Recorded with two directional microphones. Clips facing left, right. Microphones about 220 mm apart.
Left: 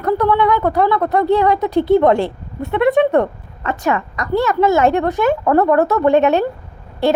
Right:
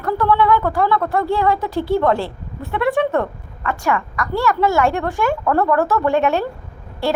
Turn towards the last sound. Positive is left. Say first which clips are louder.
# left 4 dB
turn(degrees=20)  # may be behind; listen again after turning